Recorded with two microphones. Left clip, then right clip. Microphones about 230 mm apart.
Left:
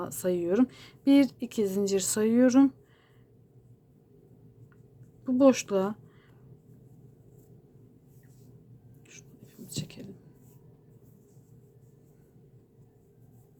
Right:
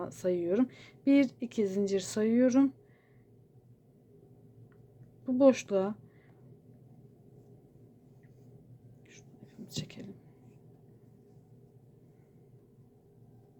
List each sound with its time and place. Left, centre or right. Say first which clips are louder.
0.0 s speech: left 2 dB; centre
5.2 s speech: left 2 dB; centre
9.6 s whispering: left 2 dB; centre